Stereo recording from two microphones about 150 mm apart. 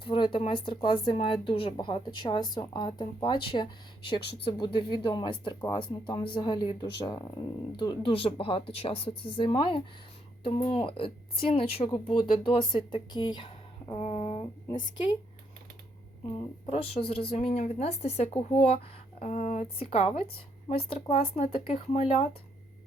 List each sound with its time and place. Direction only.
0.0 s speech: 35° left (ahead or behind)
16.6 s speech: 40° left (ahead or behind)
19.6 s speech: 40° left (ahead or behind)